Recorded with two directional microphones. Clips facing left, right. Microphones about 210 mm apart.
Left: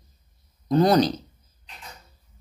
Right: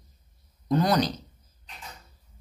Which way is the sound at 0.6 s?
30° left (ahead or behind).